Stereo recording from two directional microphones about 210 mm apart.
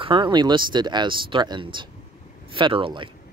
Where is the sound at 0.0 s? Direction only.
25° right (ahead or behind).